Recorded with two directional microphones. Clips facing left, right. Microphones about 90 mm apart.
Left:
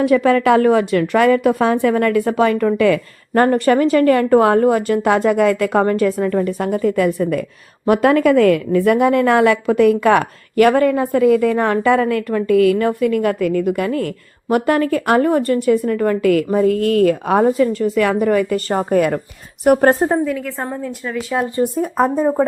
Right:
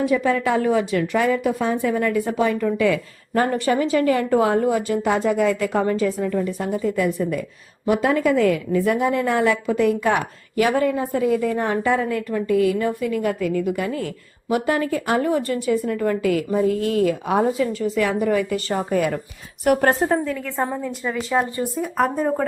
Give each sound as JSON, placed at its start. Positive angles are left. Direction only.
{"t": 0.0, "sound": "a woman's voice", "side_deg": 65}
{"t": 19.6, "sound": "a woman's voice", "side_deg": 35}
{"t": 20.2, "sound": "a woman's voice", "side_deg": 5}
{"t": 21.9, "sound": "speech", "side_deg": 25}